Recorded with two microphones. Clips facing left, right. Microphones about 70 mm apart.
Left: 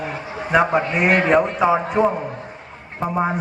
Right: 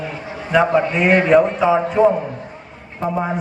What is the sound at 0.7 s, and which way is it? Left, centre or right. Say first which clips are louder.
Speech: right 2 dB; centre.